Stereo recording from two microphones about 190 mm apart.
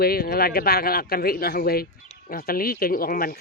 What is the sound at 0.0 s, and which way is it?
A man's voice, 55° left (ahead or behind).